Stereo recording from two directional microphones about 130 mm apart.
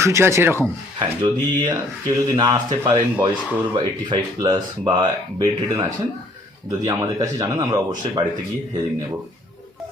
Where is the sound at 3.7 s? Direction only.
35° right (ahead or behind).